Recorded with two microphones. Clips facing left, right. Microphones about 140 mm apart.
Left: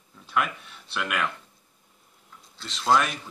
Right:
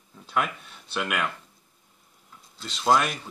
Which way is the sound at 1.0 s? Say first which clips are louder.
Even; 15° right (ahead or behind).